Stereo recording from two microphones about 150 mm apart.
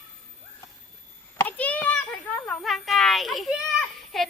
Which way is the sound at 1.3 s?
10° left (ahead or behind).